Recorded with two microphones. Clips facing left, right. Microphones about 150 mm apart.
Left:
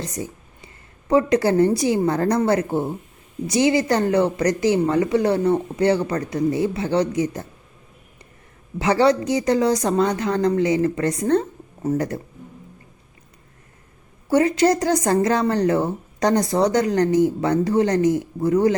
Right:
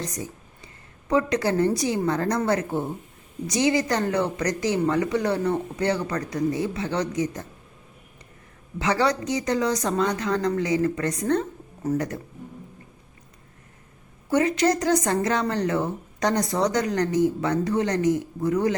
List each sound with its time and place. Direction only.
0.2 s a woman's voice: 30° left (ahead or behind)
8.8 s a woman's voice: 30° left (ahead or behind)
14.3 s a woman's voice: 35° left (ahead or behind)